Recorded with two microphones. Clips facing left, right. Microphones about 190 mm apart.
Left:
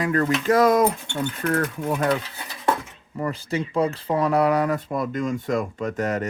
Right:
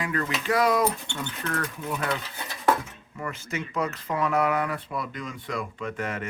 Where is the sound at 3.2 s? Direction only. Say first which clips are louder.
Left 7 dB; 35° left (ahead or behind).